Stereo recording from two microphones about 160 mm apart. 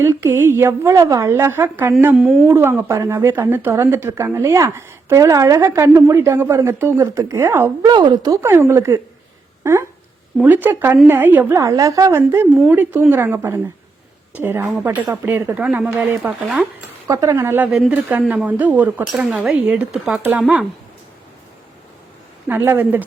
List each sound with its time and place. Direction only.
0.0 s speech: 15° right (ahead or behind)
10.4 s speech: 10° right (ahead or behind)
17.1 s speech: 20° right (ahead or behind); by 20.7 s 5° right (ahead or behind)
22.4 s speech: 10° right (ahead or behind)